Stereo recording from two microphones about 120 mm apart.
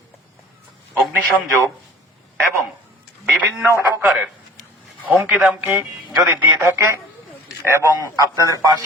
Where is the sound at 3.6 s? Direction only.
20° right (ahead or behind).